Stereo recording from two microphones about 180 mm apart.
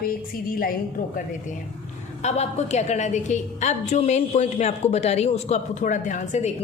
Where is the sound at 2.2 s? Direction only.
40° left (ahead or behind).